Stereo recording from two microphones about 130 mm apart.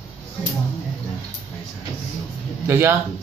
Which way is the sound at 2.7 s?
20° right (ahead or behind).